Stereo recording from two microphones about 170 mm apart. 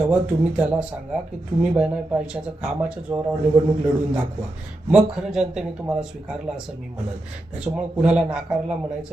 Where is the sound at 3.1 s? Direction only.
15° right (ahead or behind).